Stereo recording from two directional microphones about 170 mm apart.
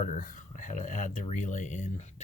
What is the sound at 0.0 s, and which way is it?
Speech, 50° left (ahead or behind).